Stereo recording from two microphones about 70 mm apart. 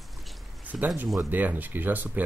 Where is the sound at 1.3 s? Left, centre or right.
Right.